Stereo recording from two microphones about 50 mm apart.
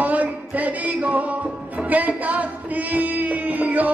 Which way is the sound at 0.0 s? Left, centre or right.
Right.